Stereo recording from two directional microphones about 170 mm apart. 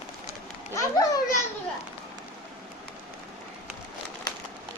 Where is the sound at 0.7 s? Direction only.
20° left (ahead or behind).